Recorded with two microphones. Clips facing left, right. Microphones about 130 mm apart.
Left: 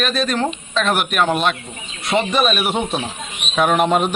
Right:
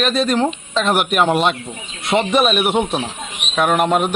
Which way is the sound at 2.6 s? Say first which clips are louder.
Right 3 dB; centre (ahead or behind).